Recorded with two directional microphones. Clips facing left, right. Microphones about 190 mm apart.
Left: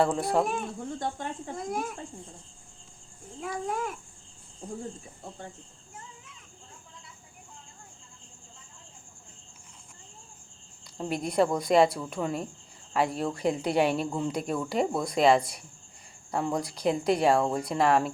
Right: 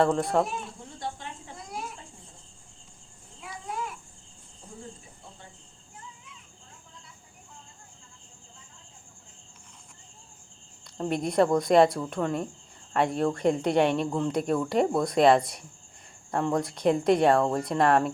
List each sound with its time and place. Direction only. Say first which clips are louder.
0.0 s speech: right 1 dB; 5° left (ahead or behind)
0.4 s speech: left 5 dB; 50° left (ahead or behind)
3.4 s speech: left 5 dB; 50° left (ahead or behind)
10.9 s speech: right 2 dB; centre (ahead or behind)